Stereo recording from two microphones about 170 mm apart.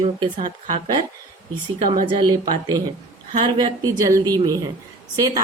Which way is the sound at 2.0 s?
25° right (ahead or behind).